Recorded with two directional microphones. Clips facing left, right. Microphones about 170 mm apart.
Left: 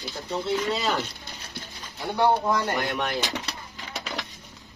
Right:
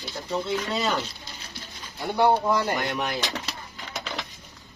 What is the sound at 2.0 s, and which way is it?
Speech, 5° right (ahead or behind).